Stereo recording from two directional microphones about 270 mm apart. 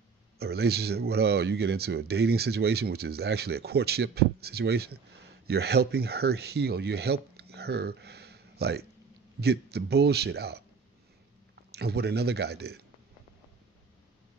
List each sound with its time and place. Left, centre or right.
0.4 s speech: right
11.7 s speech: right